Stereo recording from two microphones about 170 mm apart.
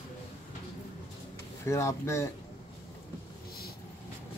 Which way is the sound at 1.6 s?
15° left (ahead or behind).